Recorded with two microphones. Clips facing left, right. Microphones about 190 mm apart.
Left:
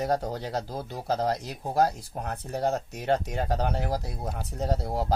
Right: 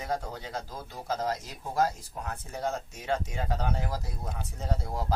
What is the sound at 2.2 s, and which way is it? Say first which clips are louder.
Speech: left 5 dB; 60° left (ahead or behind).